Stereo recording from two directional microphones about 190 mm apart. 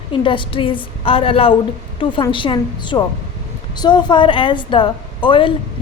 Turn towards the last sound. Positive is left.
turn(degrees=25)  # may be behind; listen again after turning